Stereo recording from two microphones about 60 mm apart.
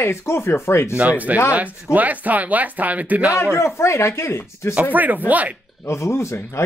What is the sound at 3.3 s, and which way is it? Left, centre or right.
Speech, left.